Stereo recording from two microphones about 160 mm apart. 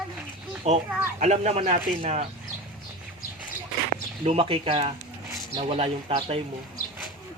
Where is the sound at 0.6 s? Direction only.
40° right (ahead or behind).